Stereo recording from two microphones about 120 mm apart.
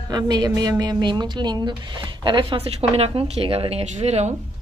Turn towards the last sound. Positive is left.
turn(degrees=-65)  # may be behind; listen again after turning